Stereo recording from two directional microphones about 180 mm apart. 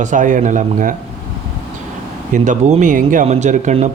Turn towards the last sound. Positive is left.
turn(degrees=-40)  # may be behind; listen again after turning